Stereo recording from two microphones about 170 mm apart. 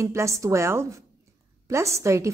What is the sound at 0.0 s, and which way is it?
A woman's voice, 15° right (ahead or behind).